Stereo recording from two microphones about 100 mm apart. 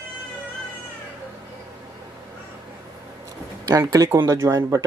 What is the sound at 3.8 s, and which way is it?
Speech, 30° right (ahead or behind).